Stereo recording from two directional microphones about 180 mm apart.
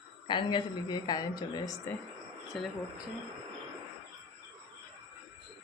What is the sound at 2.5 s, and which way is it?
Speech, centre (ahead or behind).